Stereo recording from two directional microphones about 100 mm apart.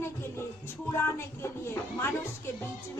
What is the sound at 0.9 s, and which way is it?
Speech, 25° left (ahead or behind).